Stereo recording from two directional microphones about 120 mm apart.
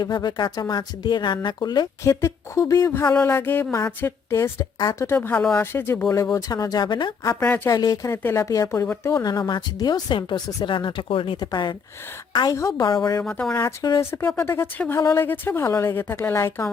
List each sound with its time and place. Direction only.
0.0 s speech: 35° left (ahead or behind)
5.1 s speech: 15° left (ahead or behind); by 7.1 s 40° left (ahead or behind)
7.3 s speech: 15° left (ahead or behind)
7.7 s speech: 30° left (ahead or behind)
9.2 s a woman's voice: 35° left (ahead or behind)
12.5 s speech: 25° left (ahead or behind)
13.2 s speech: 5° left (ahead or behind)
14.0 s speech: 20° left (ahead or behind)